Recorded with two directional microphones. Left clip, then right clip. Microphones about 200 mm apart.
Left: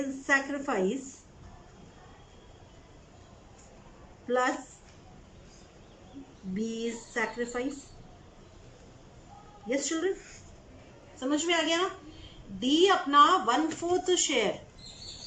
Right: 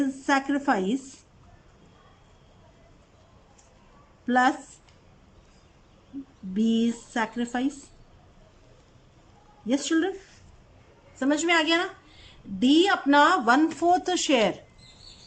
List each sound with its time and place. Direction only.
0.3 s speech: 50° right (ahead or behind)
4.3 s speech: 50° right (ahead or behind)
6.6 s speech: 50° right (ahead or behind)
9.6 s speech: 50° right (ahead or behind)
11.2 s speech: 50° right (ahead or behind)